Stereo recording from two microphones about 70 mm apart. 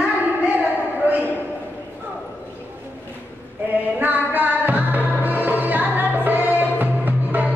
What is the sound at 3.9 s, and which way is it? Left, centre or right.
Music, right.